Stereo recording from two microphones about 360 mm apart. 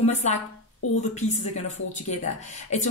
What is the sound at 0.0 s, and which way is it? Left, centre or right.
Speech, centre.